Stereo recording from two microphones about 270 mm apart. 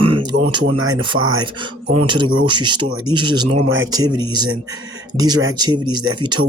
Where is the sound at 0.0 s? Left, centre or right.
Centre.